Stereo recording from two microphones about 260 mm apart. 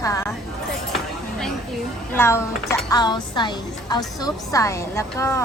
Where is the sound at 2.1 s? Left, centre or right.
Centre.